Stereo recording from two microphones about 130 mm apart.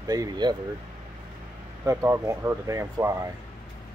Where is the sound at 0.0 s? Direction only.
30° right (ahead or behind).